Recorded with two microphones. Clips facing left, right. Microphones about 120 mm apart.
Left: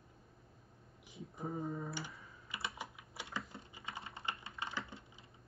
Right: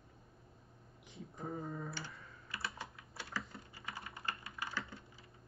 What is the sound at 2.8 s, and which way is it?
Typing, 15° left (ahead or behind).